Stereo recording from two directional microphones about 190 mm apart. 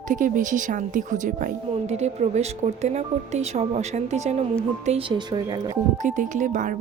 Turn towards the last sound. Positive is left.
turn(degrees=-40)  # may be behind; listen again after turning